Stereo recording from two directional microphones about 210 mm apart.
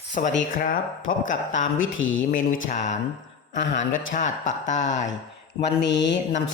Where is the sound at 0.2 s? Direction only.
40° left (ahead or behind).